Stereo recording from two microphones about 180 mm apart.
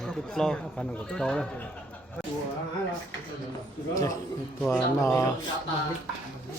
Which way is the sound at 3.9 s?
20° left (ahead or behind).